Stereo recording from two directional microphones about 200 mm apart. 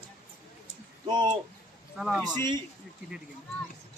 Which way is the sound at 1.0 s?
20° right (ahead or behind).